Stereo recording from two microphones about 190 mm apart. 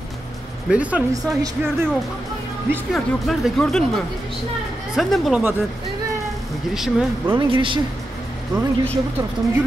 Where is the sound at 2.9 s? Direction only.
Centre (ahead or behind).